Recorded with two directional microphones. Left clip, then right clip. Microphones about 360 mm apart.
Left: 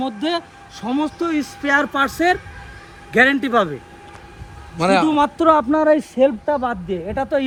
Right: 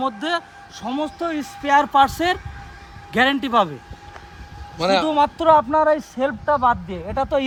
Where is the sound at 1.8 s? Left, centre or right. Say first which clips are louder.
Right 4 dB; right.